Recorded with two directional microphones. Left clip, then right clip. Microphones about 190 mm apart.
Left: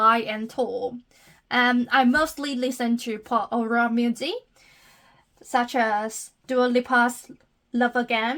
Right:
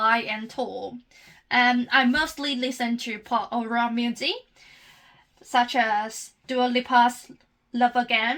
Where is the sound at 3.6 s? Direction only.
30° left (ahead or behind).